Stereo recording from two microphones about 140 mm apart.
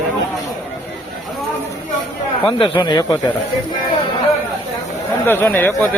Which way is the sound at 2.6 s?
35° left (ahead or behind).